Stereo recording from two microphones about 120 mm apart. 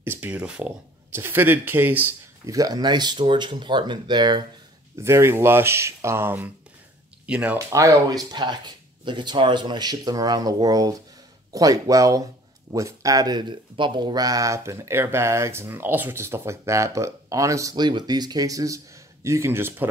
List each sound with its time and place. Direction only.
0.0 s speech: 15° right (ahead or behind)
2.4 s speech: 30° right (ahead or behind)
4.9 s speech: 20° right (ahead or behind)
7.7 s speech: 25° right (ahead or behind)